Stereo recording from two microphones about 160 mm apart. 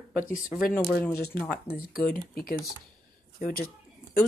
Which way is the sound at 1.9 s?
65° left (ahead or behind).